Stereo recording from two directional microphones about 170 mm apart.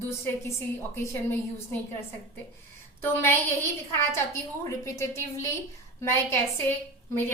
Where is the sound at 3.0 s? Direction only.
10° left (ahead or behind).